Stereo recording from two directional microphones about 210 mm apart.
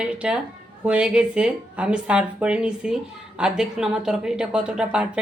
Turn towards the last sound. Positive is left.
turn(degrees=-5)  # may be behind; listen again after turning